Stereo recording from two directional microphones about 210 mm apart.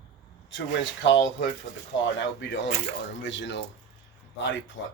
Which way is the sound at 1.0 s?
60° left (ahead or behind).